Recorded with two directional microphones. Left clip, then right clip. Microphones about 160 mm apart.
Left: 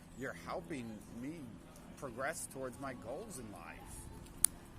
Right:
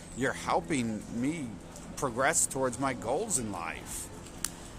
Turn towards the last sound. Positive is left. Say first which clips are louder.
# right 15 dB
turn(degrees=-35)  # may be behind; listen again after turning